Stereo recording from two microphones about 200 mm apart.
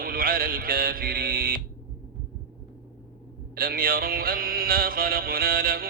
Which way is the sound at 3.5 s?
45° right (ahead or behind).